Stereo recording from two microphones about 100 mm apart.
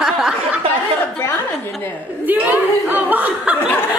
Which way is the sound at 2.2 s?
15° right (ahead or behind).